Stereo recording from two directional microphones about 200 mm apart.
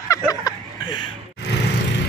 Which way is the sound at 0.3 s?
20° left (ahead or behind).